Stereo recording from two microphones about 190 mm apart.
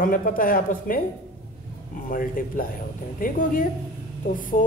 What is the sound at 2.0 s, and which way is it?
A man's voice, 45° left (ahead or behind).